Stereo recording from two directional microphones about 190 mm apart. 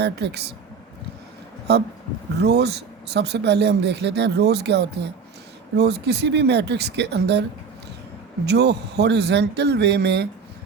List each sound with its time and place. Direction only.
0.0 s speech: 60° right (ahead or behind)
1.7 s speech: 60° right (ahead or behind)
8.4 s speech: 60° right (ahead or behind)